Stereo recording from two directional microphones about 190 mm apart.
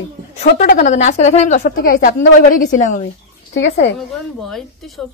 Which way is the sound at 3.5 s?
70° left (ahead or behind).